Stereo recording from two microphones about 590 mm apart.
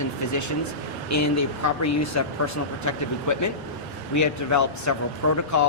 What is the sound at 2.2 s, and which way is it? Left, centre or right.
Speech, left.